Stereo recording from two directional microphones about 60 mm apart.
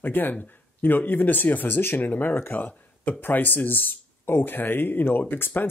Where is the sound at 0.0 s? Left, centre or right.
Left.